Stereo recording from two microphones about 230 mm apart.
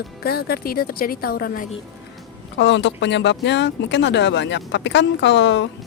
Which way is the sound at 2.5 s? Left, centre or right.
Left.